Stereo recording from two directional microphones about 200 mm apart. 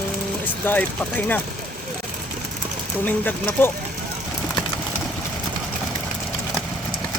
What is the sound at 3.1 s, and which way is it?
Speech, 10° left (ahead or behind).